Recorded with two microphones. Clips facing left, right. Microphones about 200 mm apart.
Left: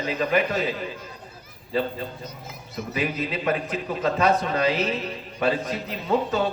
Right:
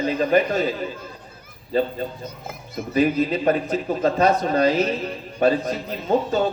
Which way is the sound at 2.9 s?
35° right (ahead or behind).